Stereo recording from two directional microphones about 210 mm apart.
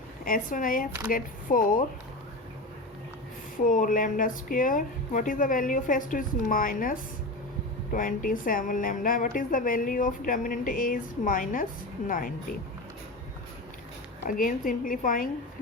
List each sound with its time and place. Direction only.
0.3 s a woman's voice: 40° left (ahead or behind)
3.6 s a woman's voice: 40° left (ahead or behind)
14.3 s a woman's voice: 40° left (ahead or behind)